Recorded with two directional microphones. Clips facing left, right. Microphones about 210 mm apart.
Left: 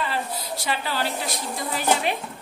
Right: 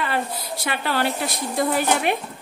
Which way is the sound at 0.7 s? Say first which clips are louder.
Right 4 dB; 60° right (ahead or behind).